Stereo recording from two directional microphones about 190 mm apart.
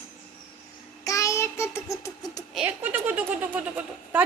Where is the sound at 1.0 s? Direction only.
15° left (ahead or behind).